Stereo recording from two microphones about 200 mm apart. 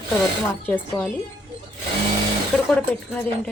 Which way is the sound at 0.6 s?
10° left (ahead or behind).